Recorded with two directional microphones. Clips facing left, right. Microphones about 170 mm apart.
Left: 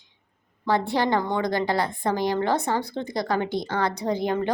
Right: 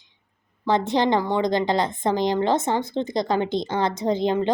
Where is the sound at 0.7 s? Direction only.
20° right (ahead or behind).